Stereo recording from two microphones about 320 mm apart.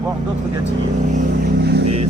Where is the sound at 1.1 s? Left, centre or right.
Right.